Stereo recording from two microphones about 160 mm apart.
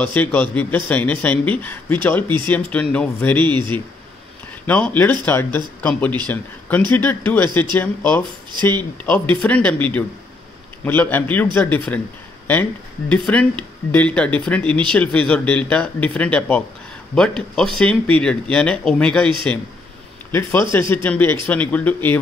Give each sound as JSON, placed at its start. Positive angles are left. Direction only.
{"t": 0.0, "sound": "a man's voice", "side_deg": 10}
{"t": 2.2, "sound": "speech", "side_deg": -30}
{"t": 2.5, "sound": "a man's voice", "side_deg": 10}
{"t": 4.6, "sound": "a man's voice", "side_deg": 10}
{"t": 13.1, "sound": "a man's voice", "side_deg": 5}